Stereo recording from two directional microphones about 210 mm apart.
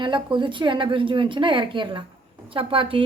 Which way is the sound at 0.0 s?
20° right (ahead or behind).